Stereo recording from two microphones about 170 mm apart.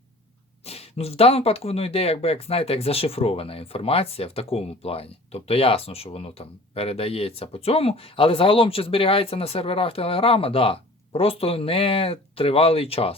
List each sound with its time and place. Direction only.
0.6 s speech: 35° left (ahead or behind)